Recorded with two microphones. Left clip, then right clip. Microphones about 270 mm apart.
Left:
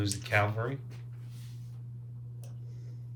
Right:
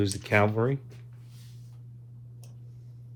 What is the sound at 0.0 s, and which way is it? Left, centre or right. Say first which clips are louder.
Speech: right 5 dB; right.